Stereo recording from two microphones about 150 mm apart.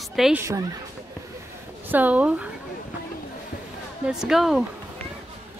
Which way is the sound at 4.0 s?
5° right (ahead or behind).